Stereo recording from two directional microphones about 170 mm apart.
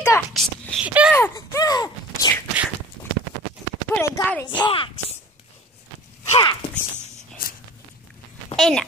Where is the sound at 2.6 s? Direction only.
10° right (ahead or behind).